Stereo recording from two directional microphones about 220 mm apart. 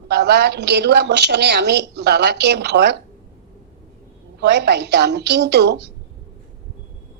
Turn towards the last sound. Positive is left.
turn(degrees=-50)  # may be behind; listen again after turning